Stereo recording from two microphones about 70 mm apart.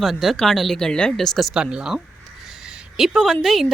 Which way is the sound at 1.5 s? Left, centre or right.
Centre.